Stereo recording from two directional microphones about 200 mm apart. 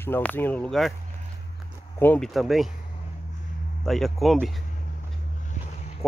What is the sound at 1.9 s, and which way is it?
Speech, 10° left (ahead or behind).